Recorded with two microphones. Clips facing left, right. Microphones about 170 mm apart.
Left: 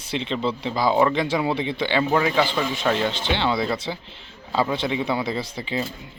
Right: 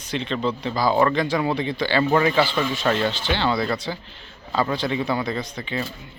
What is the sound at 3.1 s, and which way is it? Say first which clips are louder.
Speech: even; 25° left (ahead or behind).